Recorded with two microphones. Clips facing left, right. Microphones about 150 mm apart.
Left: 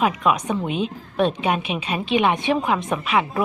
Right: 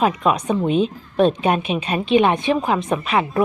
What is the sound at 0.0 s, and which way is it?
A woman's voice, 30° right (ahead or behind).